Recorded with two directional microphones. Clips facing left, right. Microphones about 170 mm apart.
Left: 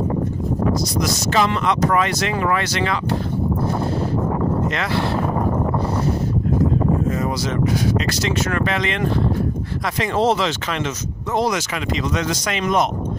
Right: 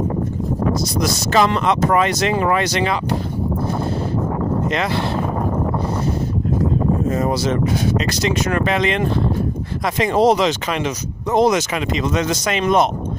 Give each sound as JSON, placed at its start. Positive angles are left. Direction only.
{"t": 1.3, "sound": "speech", "side_deg": -40}
{"t": 1.7, "sound": "speech", "side_deg": -25}
{"t": 7.1, "sound": "speech", "side_deg": -30}
{"t": 8.1, "sound": "speech", "side_deg": -20}